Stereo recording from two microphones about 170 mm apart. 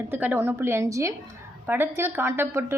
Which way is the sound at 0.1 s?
10° right (ahead or behind).